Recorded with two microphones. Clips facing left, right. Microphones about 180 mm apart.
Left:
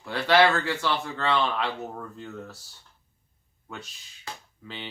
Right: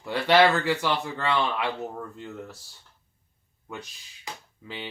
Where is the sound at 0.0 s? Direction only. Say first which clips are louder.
Right 1 dB; 20° right (ahead or behind).